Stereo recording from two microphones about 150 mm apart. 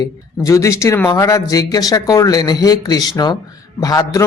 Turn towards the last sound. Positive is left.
turn(degrees=25)  # may be behind; listen again after turning